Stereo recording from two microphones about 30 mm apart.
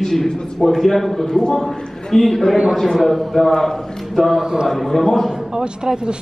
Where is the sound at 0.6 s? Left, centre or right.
Centre.